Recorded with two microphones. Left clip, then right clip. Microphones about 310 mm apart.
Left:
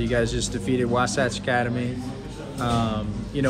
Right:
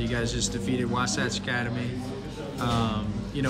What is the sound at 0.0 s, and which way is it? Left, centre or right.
A man's voice, centre.